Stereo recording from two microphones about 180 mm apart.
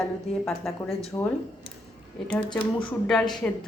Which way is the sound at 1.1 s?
20° left (ahead or behind).